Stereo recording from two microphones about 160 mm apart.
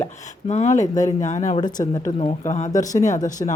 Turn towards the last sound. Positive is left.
turn(degrees=20)  # may be behind; listen again after turning